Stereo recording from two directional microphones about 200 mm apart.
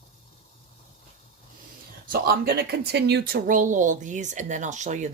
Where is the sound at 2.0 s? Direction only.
45° right (ahead or behind).